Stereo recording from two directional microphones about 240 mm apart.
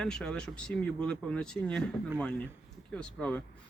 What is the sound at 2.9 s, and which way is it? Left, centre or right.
Speech, centre.